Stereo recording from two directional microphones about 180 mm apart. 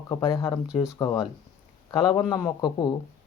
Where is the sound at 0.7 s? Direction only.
5° right (ahead or behind).